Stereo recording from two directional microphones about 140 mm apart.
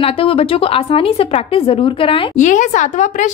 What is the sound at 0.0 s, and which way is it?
Speech, 40° left (ahead or behind).